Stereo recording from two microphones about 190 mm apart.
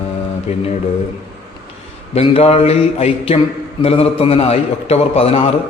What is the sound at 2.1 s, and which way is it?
A man's voice, 30° left (ahead or behind).